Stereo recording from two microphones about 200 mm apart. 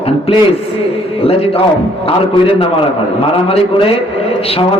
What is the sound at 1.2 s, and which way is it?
Speech, 30° left (ahead or behind).